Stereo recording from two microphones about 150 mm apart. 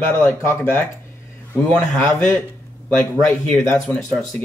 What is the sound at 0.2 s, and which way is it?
Speech, 15° left (ahead or behind).